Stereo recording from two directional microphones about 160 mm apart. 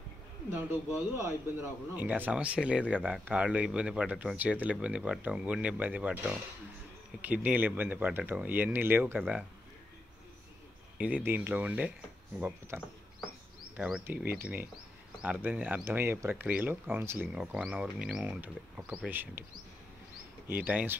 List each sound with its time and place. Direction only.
0.5 s speech: 15° right (ahead or behind)
11.0 s speech: 10° right (ahead or behind)
20.4 s speech: 10° right (ahead or behind)